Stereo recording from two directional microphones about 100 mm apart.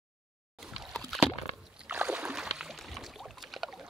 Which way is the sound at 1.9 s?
10° right (ahead or behind).